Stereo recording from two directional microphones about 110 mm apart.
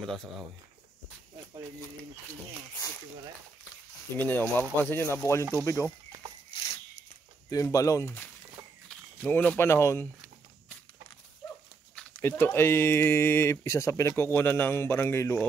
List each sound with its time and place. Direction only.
0.0 s speech: centre (ahead or behind)
4.2 s speech: 20° left (ahead or behind)
6.5 s a sound: 45° left (ahead or behind)
7.4 s speech: 30° left (ahead or behind)
9.2 s speech: 15° left (ahead or behind)
12.2 s speech: 20° left (ahead or behind)